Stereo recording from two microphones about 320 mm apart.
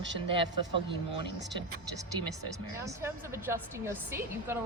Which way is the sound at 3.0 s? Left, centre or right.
Centre.